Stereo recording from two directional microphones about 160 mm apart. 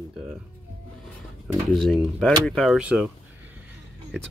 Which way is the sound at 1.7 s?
Centre (ahead or behind).